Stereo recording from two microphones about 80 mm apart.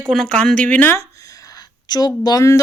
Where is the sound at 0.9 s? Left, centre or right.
Left.